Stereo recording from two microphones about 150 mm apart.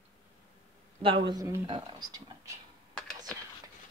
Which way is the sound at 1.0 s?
35° right (ahead or behind).